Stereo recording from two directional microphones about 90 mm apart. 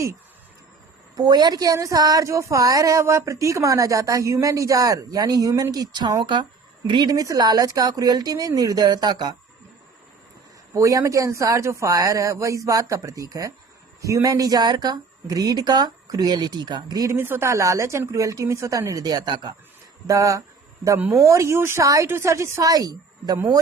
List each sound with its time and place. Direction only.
1.1 s a woman's voice: 50° right (ahead or behind)
7.1 s speech: 40° right (ahead or behind)
10.8 s a woman's voice: 35° right (ahead or behind)
17.1 s a woman's voice: 25° right (ahead or behind); by 19.5 s 50° right (ahead or behind)
20.1 s a woman's voice: 35° right (ahead or behind)
22.7 s a woman's voice: 45° right (ahead or behind)